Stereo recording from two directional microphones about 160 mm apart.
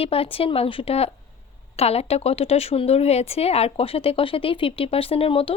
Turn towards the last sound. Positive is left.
turn(degrees=35)  # may be behind; listen again after turning